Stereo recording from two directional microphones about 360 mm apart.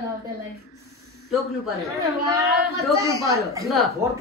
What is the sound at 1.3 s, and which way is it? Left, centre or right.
Speech, centre.